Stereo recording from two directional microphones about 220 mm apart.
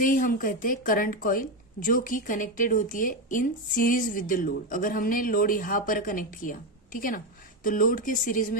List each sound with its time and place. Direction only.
0.0 s a woman's voice: 40° left (ahead or behind)